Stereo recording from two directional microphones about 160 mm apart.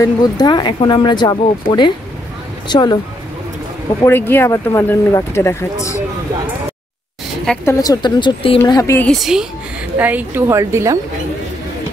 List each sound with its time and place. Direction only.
0.0 s speech: 25° left (ahead or behind)
4.0 s speech: 15° left (ahead or behind)
7.6 s speech: 20° left (ahead or behind)
8.6 s speech: 20° left (ahead or behind)
9.0 s a woman's voice: centre (ahead or behind); by 11.0 s 20° right (ahead or behind)